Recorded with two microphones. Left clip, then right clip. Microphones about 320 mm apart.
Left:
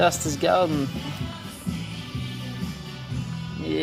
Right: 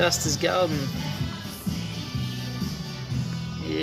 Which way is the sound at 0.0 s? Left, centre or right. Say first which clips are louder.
Left 2 dB; centre.